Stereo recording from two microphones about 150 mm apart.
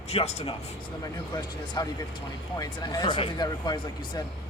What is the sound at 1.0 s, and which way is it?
Speech, 25° left (ahead or behind).